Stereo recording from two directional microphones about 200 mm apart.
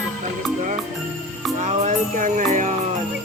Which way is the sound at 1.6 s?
35° right (ahead or behind).